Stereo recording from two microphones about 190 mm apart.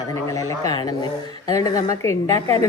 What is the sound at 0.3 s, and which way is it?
A woman's voice, 15° left (ahead or behind).